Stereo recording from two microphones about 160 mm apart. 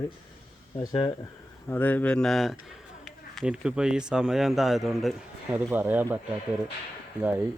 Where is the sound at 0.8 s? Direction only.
25° left (ahead or behind); by 6.1 s 10° right (ahead or behind).